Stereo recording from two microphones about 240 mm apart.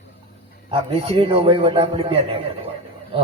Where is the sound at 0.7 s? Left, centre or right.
Right.